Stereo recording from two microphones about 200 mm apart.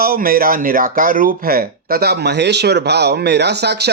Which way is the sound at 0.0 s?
45° right (ahead or behind).